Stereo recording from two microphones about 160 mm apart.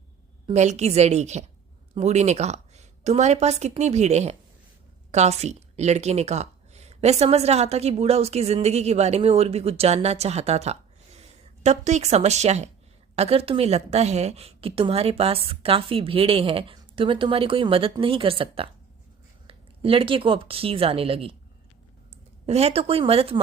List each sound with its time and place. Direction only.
0.5 s a woman's voice: 45° right (ahead or behind)
22.4 s a woman's voice: 40° right (ahead or behind)